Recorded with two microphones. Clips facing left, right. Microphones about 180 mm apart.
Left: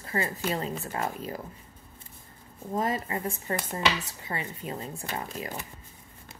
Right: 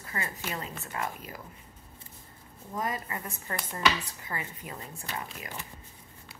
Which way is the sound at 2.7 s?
25° left (ahead or behind).